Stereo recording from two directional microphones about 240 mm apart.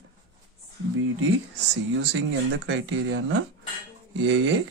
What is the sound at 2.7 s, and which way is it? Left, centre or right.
Speech, right.